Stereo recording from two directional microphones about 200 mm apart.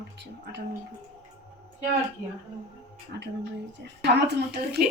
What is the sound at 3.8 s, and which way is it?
A woman's voice, 55° right (ahead or behind).